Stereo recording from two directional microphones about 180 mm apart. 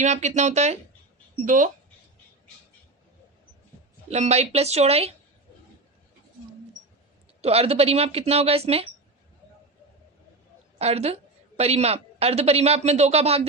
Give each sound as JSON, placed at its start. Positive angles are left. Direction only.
{"t": 0.0, "sound": "a woman's voice", "side_deg": -40}
{"t": 4.1, "sound": "a woman's voice", "side_deg": -35}
{"t": 7.4, "sound": "a woman's voice", "side_deg": -35}
{"t": 10.8, "sound": "a woman's voice", "side_deg": -35}